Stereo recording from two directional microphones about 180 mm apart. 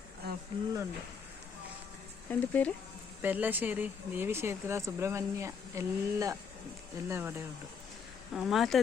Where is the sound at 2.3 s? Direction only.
10° left (ahead or behind).